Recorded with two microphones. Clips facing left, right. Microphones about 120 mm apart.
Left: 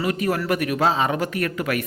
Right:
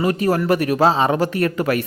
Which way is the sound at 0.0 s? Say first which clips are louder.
Right 5 dB; 35° right (ahead or behind).